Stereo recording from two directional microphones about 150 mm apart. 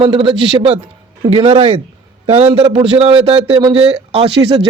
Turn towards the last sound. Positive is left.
turn(degrees=-40)  # may be behind; listen again after turning